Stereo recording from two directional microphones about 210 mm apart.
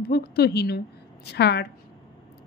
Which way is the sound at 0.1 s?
50° left (ahead or behind).